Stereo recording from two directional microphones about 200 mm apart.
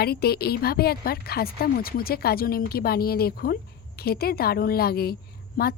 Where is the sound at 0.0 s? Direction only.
50° left (ahead or behind).